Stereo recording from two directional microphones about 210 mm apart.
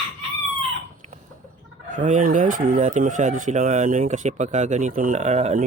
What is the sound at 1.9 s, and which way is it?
Speech, 35° right (ahead or behind).